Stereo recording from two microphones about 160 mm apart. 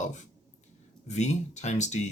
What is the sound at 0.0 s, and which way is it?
Speech, 50° left (ahead or behind).